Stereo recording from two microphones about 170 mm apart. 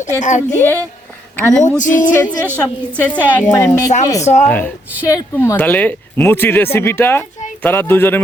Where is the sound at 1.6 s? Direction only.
45° left (ahead or behind).